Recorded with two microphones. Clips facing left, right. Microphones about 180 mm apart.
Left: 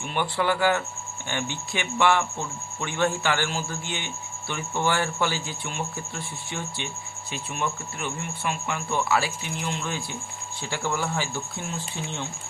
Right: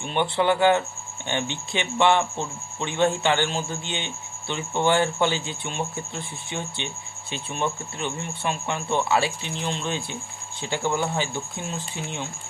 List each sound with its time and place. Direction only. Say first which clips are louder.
0.0 s a man's voice: right 3 dB; 25° right (ahead or behind)